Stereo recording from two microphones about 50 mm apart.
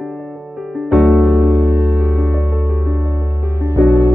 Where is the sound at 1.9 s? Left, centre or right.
Right.